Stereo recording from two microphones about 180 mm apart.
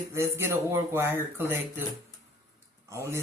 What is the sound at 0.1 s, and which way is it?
Speech, 15° right (ahead or behind).